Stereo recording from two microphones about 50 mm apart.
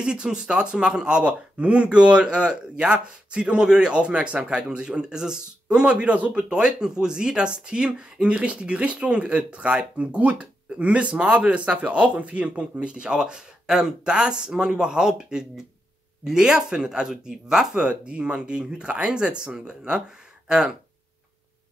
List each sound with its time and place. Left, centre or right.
0.0 s speech: centre
5.9 s speech: right